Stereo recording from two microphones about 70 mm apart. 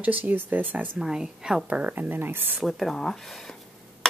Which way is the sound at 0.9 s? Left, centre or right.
Centre.